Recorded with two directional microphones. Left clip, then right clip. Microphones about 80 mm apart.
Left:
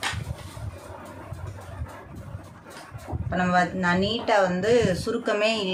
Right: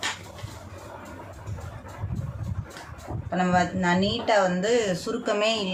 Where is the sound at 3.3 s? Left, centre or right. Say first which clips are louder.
Left 1 dB; left.